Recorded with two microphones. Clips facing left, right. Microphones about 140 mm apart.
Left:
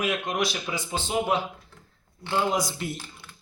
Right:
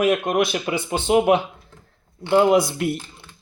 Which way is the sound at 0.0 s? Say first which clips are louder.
Right 8 dB; 50° right (ahead or behind).